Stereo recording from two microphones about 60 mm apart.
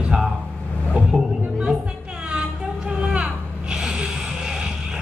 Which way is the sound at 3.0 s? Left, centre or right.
Centre.